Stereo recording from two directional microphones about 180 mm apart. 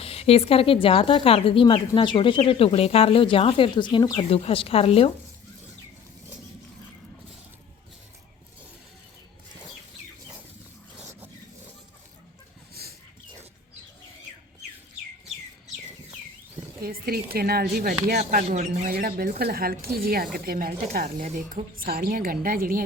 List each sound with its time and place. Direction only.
0.0 s speech: 35° left (ahead or behind)
10.9 s a sound: 10° right (ahead or behind)
12.8 s a sound: 60° right (ahead or behind)
16.8 s speech: 55° right (ahead or behind)
18.4 s speech: 40° right (ahead or behind)
18.9 s speech: 55° right (ahead or behind)